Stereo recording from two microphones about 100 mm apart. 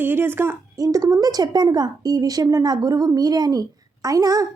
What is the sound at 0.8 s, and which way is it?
Speech, 35° right (ahead or behind).